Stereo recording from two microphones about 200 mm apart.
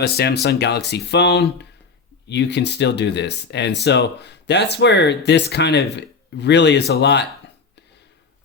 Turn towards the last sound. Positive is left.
turn(degrees=60)  # may be behind; listen again after turning